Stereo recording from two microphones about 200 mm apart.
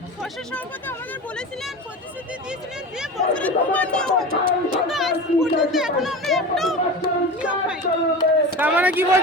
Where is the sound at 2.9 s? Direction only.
5° right (ahead or behind).